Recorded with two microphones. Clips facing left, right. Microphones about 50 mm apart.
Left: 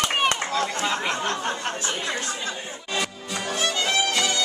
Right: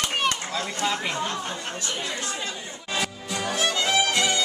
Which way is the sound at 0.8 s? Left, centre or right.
Centre.